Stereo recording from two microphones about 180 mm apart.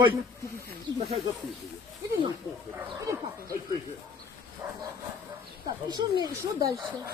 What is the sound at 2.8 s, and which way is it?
Speech, 15° right (ahead or behind).